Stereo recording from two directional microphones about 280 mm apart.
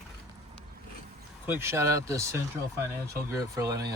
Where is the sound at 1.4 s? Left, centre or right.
Centre.